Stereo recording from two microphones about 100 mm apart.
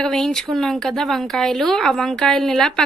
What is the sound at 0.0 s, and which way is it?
Speech, 5° left (ahead or behind).